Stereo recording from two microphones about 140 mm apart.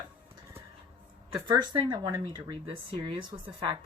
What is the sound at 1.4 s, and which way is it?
Speech, 30° right (ahead or behind).